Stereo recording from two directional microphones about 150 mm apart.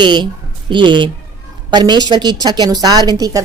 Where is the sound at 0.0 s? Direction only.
30° right (ahead or behind).